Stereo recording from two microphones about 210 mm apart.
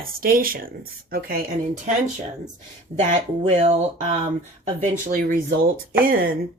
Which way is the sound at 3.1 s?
35° right (ahead or behind).